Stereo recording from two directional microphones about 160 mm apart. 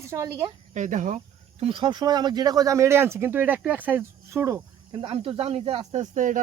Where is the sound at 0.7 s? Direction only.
50° right (ahead or behind).